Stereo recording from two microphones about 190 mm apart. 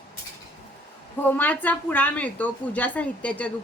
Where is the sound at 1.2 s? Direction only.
10° left (ahead or behind).